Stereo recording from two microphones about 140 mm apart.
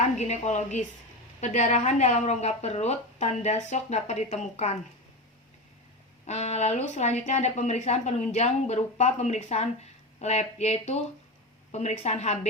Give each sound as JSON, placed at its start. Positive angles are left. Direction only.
{"t": 0.0, "sound": "a woman's voice", "side_deg": 55}
{"t": 6.2, "sound": "a woman's voice", "side_deg": 50}